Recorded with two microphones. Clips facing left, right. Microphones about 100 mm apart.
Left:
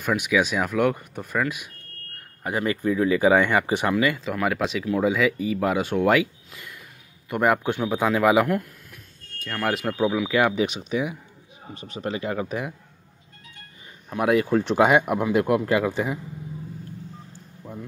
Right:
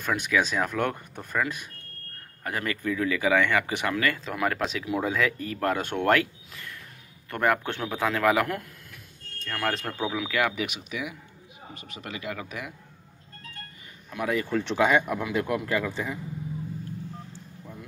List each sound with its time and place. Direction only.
0.0 s speech: 10° left (ahead or behind)
2.4 s speech: 20° left (ahead or behind)
4.2 s speech: 5° left (ahead or behind)
10.3 s speech: 25° left (ahead or behind)
14.4 s speech: 40° left (ahead or behind)